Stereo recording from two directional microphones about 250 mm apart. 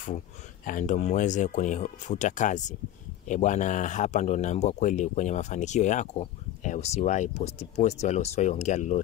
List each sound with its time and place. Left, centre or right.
0.7 s speech: left